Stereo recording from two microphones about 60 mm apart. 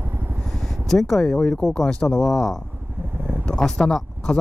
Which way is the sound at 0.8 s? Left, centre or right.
Centre.